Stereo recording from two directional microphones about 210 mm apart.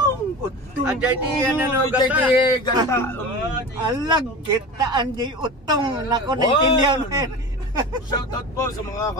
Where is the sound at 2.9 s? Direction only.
10° left (ahead or behind).